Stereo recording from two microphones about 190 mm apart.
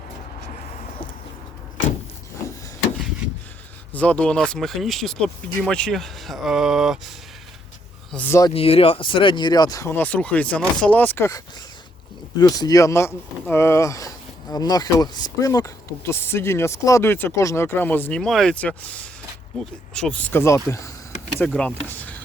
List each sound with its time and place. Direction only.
3.9 s speech: 5° left (ahead or behind)
8.1 s speech: 10° left (ahead or behind)
8.5 s speech: 30° left (ahead or behind)
21.3 s speech: 5° left (ahead or behind)